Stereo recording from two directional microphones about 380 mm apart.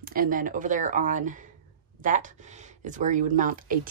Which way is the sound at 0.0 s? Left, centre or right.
Right.